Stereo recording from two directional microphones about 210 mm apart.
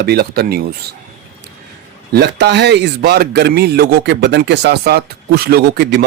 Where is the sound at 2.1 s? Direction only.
50° right (ahead or behind).